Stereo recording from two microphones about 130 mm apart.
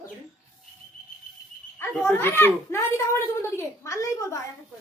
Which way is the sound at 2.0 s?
15° left (ahead or behind).